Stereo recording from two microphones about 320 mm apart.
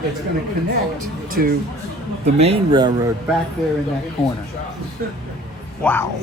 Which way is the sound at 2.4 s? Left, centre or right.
Centre.